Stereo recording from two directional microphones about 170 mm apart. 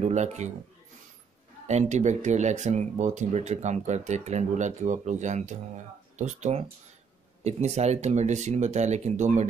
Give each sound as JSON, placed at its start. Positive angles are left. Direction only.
{"t": 0.0, "sound": "speech", "side_deg": -40}
{"t": 1.7, "sound": "speech", "side_deg": -40}